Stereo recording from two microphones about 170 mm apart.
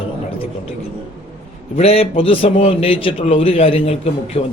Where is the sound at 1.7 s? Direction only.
35° left (ahead or behind).